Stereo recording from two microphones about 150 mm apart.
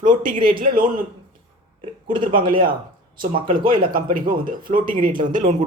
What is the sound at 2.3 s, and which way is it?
Speech, 70° right (ahead or behind).